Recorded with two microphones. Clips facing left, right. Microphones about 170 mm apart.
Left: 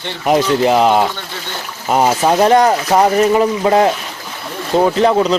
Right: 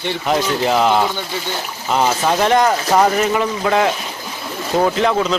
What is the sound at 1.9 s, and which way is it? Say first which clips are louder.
Speech: left 4 dB; 40° left (ahead or behind).